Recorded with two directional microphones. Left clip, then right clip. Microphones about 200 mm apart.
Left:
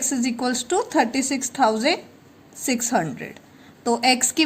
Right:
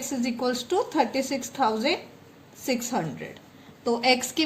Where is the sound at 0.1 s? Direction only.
55° left (ahead or behind).